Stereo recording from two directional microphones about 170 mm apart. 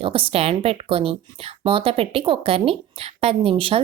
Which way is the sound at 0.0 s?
30° right (ahead or behind).